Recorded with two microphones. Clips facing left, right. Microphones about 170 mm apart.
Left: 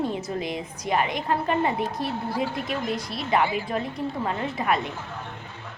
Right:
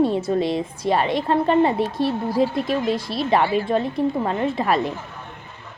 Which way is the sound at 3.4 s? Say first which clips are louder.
Right 5 dB; 15° left (ahead or behind).